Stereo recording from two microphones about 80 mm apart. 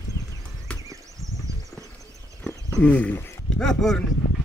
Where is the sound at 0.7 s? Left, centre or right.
Centre.